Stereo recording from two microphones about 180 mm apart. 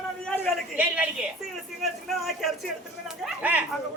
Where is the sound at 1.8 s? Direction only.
Centre (ahead or behind).